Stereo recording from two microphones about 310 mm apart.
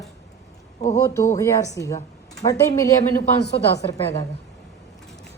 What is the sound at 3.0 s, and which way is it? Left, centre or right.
Speech, left.